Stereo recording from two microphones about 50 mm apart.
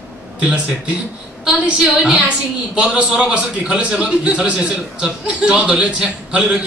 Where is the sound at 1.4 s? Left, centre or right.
Centre.